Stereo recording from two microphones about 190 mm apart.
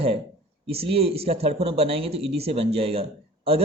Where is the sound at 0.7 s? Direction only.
30° right (ahead or behind).